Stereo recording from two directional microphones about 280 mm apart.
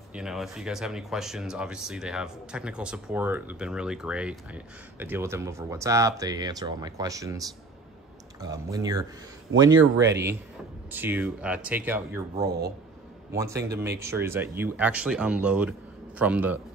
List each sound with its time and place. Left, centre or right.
0.1 s speech: centre
9.8 s speech: right
10.9 s speech: centre
12.4 s speech: right
13.4 s speech: centre